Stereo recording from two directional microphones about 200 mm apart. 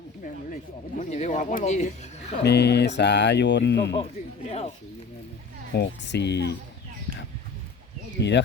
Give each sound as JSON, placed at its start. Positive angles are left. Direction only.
{"t": 0.9, "sound": "speech", "side_deg": 35}
{"t": 2.4, "sound": "speech", "side_deg": 55}
{"t": 4.4, "sound": "speech", "side_deg": 30}
{"t": 5.7, "sound": "speech", "side_deg": 60}